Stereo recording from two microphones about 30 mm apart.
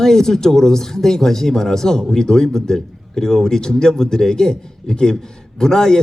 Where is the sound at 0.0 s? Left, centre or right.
Centre.